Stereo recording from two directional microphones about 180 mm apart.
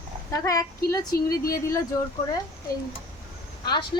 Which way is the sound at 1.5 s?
15° left (ahead or behind).